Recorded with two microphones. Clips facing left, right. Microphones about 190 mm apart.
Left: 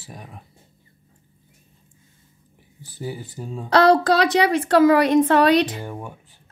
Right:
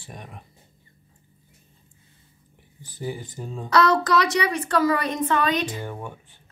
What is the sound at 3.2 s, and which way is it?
Speech, 5° left (ahead or behind).